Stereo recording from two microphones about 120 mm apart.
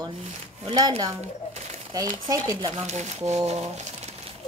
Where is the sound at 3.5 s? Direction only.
65° right (ahead or behind).